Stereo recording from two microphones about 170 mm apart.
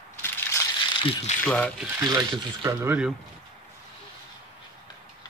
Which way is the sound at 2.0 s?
15° right (ahead or behind).